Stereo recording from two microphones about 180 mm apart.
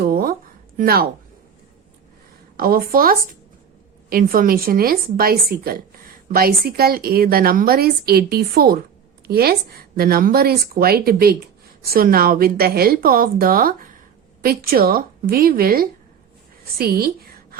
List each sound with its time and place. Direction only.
0.0 s a sound: 55° right (ahead or behind)
0.8 s a woman's voice: 55° right (ahead or behind)
2.6 s a woman's voice: 55° right (ahead or behind)